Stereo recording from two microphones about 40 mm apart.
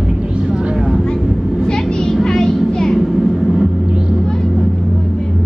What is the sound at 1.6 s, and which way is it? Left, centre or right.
Vehicle, centre.